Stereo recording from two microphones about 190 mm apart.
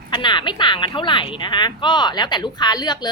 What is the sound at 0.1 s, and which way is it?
Speech, 25° left (ahead or behind).